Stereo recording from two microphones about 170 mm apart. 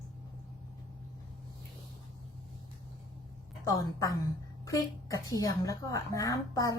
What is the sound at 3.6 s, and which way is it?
A woman's voice, 20° left (ahead or behind).